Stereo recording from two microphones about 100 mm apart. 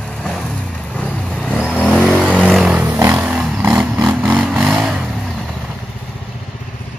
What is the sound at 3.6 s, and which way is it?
Vehicle, 20° right (ahead or behind).